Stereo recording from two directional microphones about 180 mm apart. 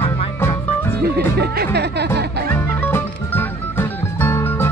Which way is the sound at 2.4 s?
10° left (ahead or behind).